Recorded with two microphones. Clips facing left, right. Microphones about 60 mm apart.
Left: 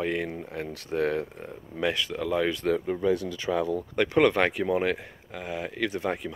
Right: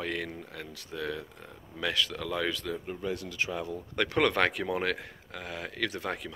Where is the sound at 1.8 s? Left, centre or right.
Left.